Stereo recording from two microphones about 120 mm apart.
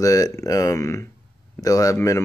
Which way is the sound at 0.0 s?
30° left (ahead or behind).